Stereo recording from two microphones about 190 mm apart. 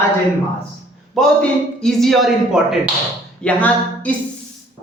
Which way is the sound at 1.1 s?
Centre (ahead or behind).